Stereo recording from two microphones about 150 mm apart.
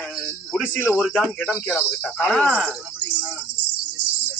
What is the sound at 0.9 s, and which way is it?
Music, 5° right (ahead or behind).